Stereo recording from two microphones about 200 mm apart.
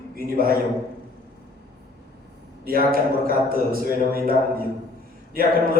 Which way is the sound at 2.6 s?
45° right (ahead or behind).